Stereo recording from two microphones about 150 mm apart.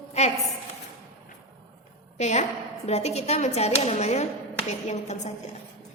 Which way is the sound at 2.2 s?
50° left (ahead or behind).